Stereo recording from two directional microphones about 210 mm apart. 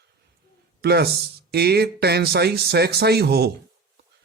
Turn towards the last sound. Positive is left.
turn(degrees=-50)  # may be behind; listen again after turning